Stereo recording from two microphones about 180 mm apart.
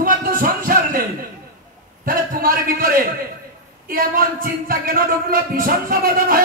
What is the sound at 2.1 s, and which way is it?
Speech, 50° right (ahead or behind).